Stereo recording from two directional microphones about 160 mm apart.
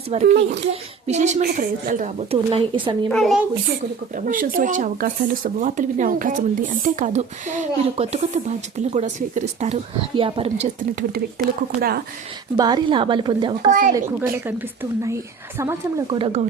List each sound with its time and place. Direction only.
0.1 s speech: 45° right (ahead or behind)
0.3 s a child's voice: 90° right
0.7 s speech: 45° right (ahead or behind)
1.4 s a woman's voice: 60° right (ahead or behind)
2.3 s speech: 35° right (ahead or behind)
3.1 s a woman's voice: centre (ahead or behind)
4.3 s speech: 55° right (ahead or behind)
10.2 s speech: 35° right (ahead or behind)
11.8 s speech: 70° right (ahead or behind)
12.5 s a woman's voice: 25° right (ahead or behind)
13.7 s a woman's voice: 55° right (ahead or behind)
13.9 s speech: 15° right (ahead or behind)
16.1 s speech: 35° right (ahead or behind)